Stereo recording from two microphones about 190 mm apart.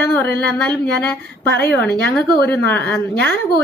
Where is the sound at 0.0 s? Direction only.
10° left (ahead or behind).